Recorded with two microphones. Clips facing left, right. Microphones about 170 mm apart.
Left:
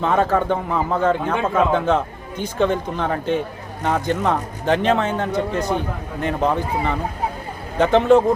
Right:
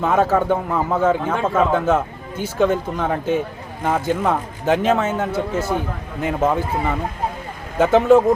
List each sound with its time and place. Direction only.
0.0 s a man's voice: 5° right (ahead or behind)
7.8 s speech: 5° right (ahead or behind)